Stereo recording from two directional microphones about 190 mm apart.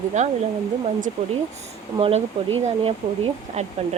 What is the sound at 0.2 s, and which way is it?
Speech, 40° right (ahead or behind).